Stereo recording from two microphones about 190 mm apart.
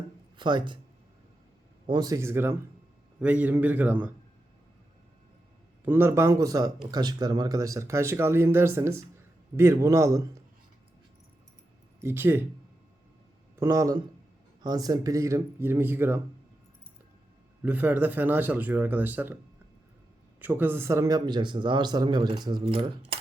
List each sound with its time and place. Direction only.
0.3 s speech: 25° right (ahead or behind)
1.9 s speech: 20° right (ahead or behind)
5.8 s speech: 10° right (ahead or behind)
11.9 s speech: 10° right (ahead or behind)
13.6 s speech: 15° right (ahead or behind)
17.6 s speech: 10° right (ahead or behind)
20.4 s speech: 10° right (ahead or behind)
22.6 s coin: 30° right (ahead or behind)